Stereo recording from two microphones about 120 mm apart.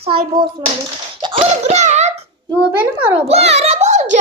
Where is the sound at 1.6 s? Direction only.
75° right (ahead or behind).